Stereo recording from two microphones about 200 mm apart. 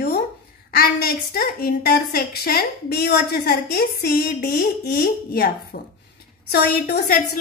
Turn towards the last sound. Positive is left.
turn(degrees=50)  # may be behind; listen again after turning